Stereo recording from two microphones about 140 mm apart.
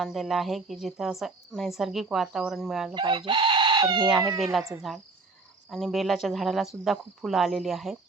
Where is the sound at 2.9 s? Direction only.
35° right (ahead or behind).